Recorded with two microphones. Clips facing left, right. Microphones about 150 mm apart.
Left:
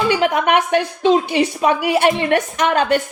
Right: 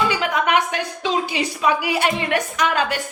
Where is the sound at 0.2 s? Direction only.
55° left (ahead or behind).